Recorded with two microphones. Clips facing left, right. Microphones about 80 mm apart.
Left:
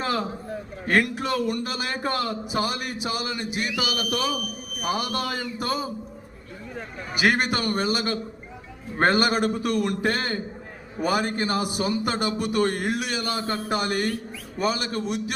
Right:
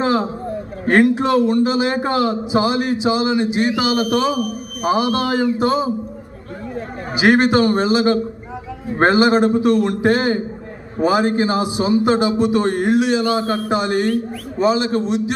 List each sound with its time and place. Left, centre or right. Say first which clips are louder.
0.0 s a man's voice: right 9 dB; right
7.3 s a man's voice: right 11 dB; right